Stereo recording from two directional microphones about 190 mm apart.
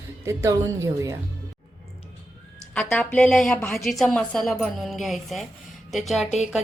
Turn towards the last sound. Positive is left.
turn(degrees=0)  # may be behind; listen again after turning